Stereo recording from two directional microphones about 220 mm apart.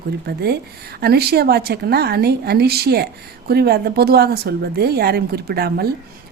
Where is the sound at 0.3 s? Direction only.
45° right (ahead or behind).